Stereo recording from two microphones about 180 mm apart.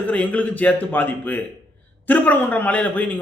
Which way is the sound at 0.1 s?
10° left (ahead or behind).